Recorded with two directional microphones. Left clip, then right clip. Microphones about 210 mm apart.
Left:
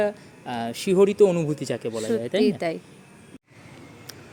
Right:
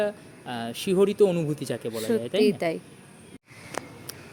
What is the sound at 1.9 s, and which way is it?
Speech, 5° right (ahead or behind).